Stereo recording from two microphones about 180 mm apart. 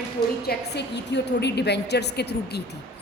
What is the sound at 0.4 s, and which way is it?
A woman's voice, 70° left (ahead or behind).